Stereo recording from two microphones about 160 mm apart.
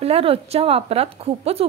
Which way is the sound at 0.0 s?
35° right (ahead or behind).